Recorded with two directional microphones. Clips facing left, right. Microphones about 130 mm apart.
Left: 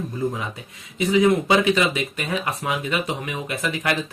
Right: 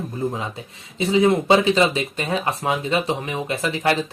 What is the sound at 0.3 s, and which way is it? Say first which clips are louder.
Speech: right 2 dB; 30° right (ahead or behind).